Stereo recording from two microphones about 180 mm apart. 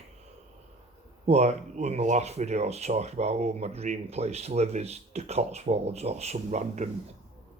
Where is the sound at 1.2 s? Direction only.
40° right (ahead or behind).